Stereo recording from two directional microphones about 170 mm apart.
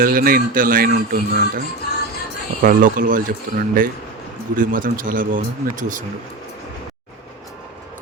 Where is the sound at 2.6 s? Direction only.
50° right (ahead or behind).